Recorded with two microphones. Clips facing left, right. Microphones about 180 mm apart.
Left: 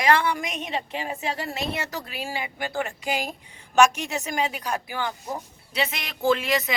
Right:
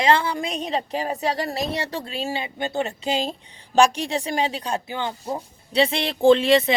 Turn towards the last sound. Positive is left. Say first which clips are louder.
# right 8 dB
turn(degrees=-30)  # may be behind; listen again after turning